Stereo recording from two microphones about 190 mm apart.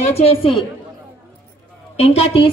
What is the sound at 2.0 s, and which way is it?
Speech, 35° left (ahead or behind).